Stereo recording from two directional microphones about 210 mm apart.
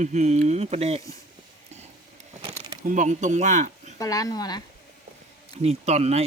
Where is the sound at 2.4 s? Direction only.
25° right (ahead or behind).